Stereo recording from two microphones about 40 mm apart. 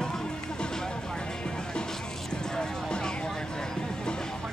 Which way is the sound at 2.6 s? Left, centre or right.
Centre.